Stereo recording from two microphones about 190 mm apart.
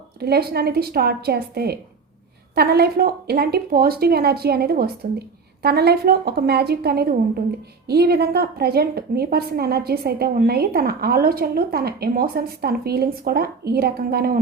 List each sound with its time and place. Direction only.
0.2 s a woman's voice: 55° right (ahead or behind)